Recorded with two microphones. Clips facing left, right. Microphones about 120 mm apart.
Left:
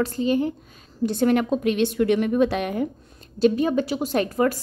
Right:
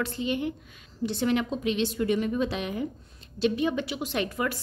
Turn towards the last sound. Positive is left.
turn(degrees=40)  # may be behind; listen again after turning